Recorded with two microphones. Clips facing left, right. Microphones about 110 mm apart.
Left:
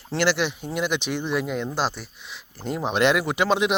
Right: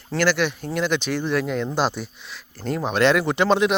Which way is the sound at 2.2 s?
15° left (ahead or behind).